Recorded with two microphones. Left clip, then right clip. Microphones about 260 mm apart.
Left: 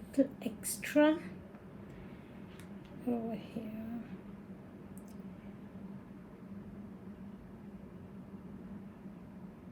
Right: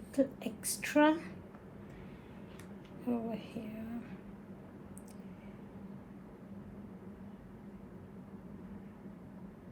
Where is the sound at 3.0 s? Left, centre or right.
Right.